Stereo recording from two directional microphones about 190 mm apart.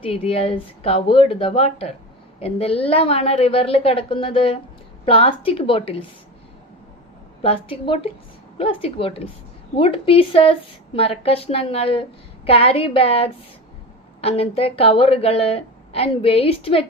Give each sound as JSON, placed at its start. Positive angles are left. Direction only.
{"t": 0.0, "sound": "a woman's voice", "side_deg": 30}
{"t": 7.4, "sound": "a woman's voice", "side_deg": 30}